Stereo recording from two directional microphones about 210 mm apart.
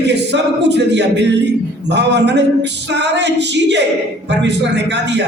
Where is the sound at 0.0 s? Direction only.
55° right (ahead or behind).